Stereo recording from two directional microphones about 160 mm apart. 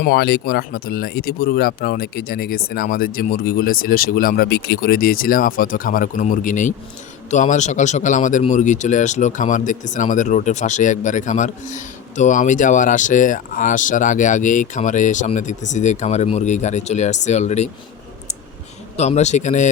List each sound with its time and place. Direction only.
0.0 s speech: 80° left; by 17.7 s 45° left (ahead or behind)
18.9 s speech: 45° left (ahead or behind)